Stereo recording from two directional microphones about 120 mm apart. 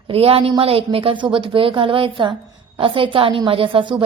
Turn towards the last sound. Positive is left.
turn(degrees=-45)  # may be behind; listen again after turning